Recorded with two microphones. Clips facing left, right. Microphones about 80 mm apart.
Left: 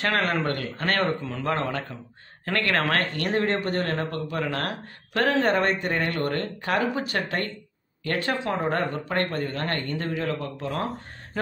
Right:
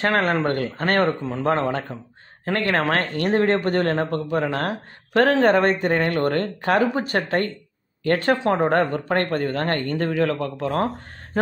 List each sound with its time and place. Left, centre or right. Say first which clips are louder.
0.0 s speech: right 4 dB; right
4.1 s speech: right 6 dB; right
10.2 s speech: right 6 dB; right